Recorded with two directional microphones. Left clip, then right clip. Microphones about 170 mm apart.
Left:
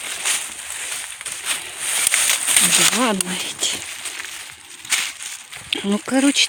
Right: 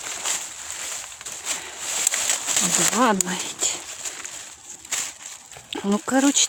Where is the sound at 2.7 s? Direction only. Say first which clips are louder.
Left 7 dB; 20° right (ahead or behind).